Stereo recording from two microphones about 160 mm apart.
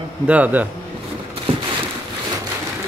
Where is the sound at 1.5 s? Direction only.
35° right (ahead or behind).